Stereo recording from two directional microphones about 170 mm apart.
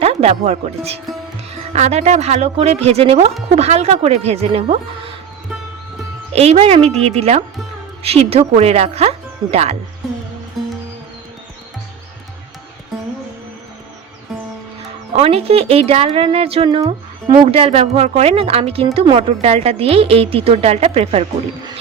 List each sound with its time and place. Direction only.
0.0 s speech: 40° right (ahead or behind)
6.3 s speech: 35° right (ahead or behind)
15.1 s speech: 40° right (ahead or behind)